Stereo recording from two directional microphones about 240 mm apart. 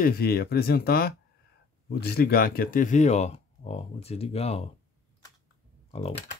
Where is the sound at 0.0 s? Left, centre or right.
Left.